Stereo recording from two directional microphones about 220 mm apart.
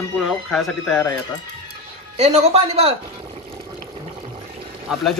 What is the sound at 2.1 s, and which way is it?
Speech, 30° right (ahead or behind).